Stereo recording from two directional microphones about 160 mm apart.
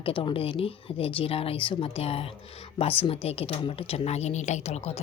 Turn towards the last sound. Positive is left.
turn(degrees=40)  # may be behind; listen again after turning